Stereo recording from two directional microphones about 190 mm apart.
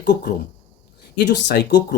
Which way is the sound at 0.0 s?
55° left (ahead or behind).